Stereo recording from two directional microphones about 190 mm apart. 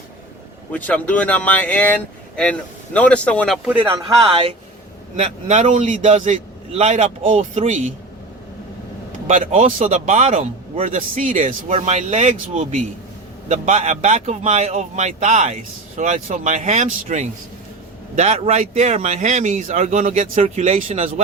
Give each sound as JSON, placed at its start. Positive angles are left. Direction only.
{"t": 0.7, "sound": "speech", "side_deg": 10}
{"t": 3.6, "sound": "speech", "side_deg": -5}
{"t": 5.1, "sound": "speech", "side_deg": -35}
{"t": 9.2, "sound": "speech", "side_deg": -40}